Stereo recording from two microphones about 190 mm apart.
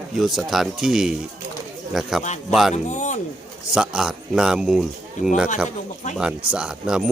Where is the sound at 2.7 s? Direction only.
40° left (ahead or behind).